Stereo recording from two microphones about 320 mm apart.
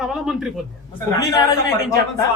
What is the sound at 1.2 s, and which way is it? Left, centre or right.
Speech, centre.